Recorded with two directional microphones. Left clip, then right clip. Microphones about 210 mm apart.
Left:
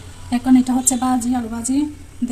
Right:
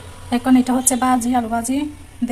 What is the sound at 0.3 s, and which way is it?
A woman's voice, 10° right (ahead or behind).